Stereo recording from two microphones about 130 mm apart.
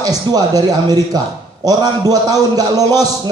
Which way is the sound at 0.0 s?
30° right (ahead or behind).